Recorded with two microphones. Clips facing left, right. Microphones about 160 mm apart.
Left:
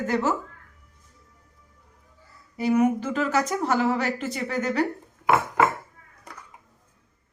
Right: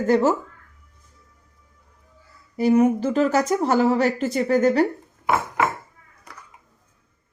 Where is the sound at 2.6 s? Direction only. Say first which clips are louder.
Right 4 dB; 35° right (ahead or behind).